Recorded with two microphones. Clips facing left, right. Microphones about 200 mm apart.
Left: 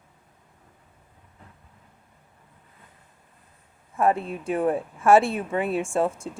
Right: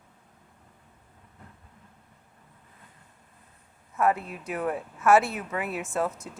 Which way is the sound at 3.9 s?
30° left (ahead or behind).